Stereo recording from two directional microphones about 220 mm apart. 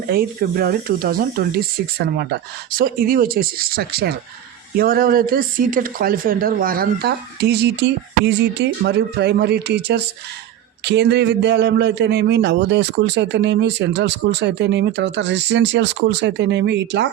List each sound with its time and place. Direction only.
0.1 s a man's voice: 40° right (ahead or behind)